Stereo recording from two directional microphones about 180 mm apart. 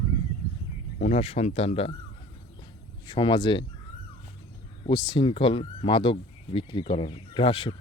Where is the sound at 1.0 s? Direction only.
35° left (ahead or behind).